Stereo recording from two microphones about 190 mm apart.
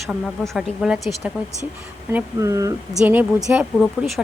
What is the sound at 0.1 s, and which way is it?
A woman's voice, centre (ahead or behind).